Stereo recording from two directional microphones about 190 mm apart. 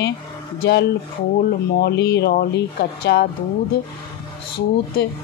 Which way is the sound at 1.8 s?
60° left (ahead or behind).